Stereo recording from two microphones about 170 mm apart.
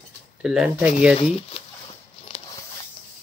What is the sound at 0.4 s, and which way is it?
Speech, centre (ahead or behind).